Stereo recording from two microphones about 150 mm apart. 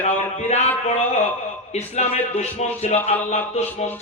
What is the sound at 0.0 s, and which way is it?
Speech, 45° left (ahead or behind).